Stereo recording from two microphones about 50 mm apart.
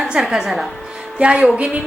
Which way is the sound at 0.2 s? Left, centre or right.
Centre.